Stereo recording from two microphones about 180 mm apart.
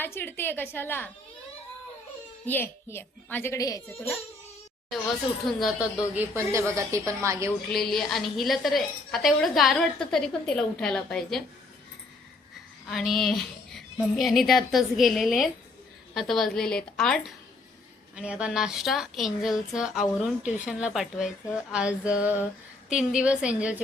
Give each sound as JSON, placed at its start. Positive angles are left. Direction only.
{"t": 0.0, "sound": "a child's voice", "side_deg": 10}
{"t": 2.5, "sound": "a child's voice", "side_deg": 10}
{"t": 5.5, "sound": "a woman's voice", "side_deg": 0}
{"t": 6.1, "sound": "a woman's voice", "side_deg": -15}
{"t": 7.7, "sound": "a woman's voice", "side_deg": 0}
{"t": 12.9, "sound": "a woman's voice", "side_deg": 0}